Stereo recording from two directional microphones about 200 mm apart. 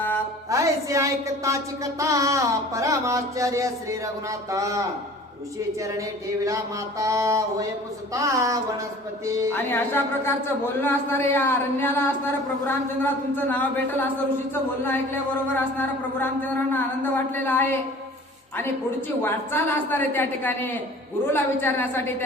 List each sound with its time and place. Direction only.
0.5 s speech: 15° right (ahead or behind)
7.0 s speech: 15° right (ahead or behind)
9.6 s a woman's voice: 10° left (ahead or behind)
13.3 s a woman's voice: 10° left (ahead or behind)
16.1 s a woman's voice: 10° left (ahead or behind)
19.2 s a woman's voice: 10° left (ahead or behind)